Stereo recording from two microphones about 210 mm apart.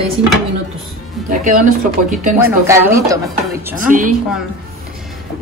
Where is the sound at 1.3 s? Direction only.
40° right (ahead or behind).